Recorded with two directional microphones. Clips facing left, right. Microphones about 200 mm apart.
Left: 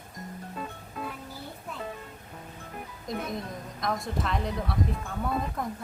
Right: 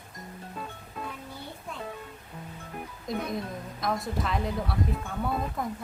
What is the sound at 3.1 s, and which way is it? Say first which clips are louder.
Speech: right 2 dB; centre (ahead or behind).